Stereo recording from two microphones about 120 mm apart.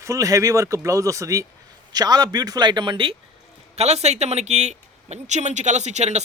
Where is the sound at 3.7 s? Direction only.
65° right (ahead or behind).